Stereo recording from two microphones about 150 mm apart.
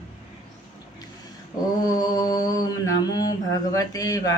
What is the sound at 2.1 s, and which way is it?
Speech, 25° left (ahead or behind).